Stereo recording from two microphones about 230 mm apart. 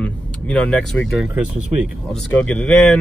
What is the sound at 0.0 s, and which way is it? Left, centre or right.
Speech, centre.